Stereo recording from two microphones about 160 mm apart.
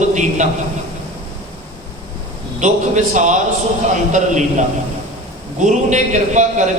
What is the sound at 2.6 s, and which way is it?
A man's voice, 50° right (ahead or behind).